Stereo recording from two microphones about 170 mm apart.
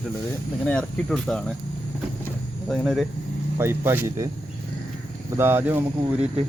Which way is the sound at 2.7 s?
Centre (ahead or behind).